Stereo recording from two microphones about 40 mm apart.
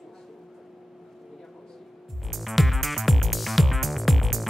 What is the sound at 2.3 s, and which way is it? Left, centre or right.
Music, centre.